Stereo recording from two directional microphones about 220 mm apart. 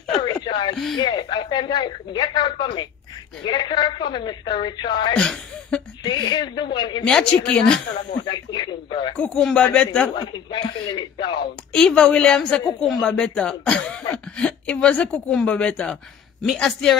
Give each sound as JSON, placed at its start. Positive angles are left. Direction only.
{"t": 0.2, "sound": "a sound", "side_deg": 20}
{"t": 0.9, "sound": "a woman's voice", "side_deg": 20}
{"t": 5.1, "sound": "speech", "side_deg": 5}
{"t": 6.0, "sound": "a woman's voice", "side_deg": 20}
{"t": 7.1, "sound": "speech", "side_deg": 5}
{"t": 8.3, "sound": "a woman's voice", "side_deg": 20}
{"t": 9.1, "sound": "speech", "side_deg": 5}
{"t": 10.1, "sound": "a woman's voice", "side_deg": 20}
{"t": 11.7, "sound": "speech", "side_deg": 5}